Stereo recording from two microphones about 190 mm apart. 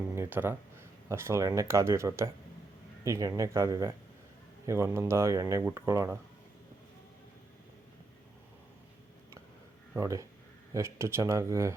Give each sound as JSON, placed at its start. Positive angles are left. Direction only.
{"t": 0.2, "sound": "speech", "side_deg": -10}
{"t": 10.0, "sound": "speech", "side_deg": -15}